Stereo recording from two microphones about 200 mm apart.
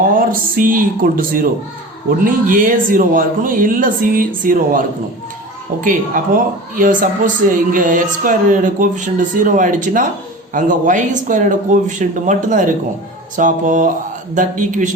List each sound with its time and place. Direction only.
0.2 s speech: 45° right (ahead or behind)
5.8 s speech: 40° right (ahead or behind)